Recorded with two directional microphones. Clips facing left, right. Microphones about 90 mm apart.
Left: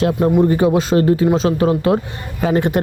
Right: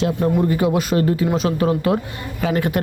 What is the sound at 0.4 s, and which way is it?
A man's voice, 30° left (ahead or behind).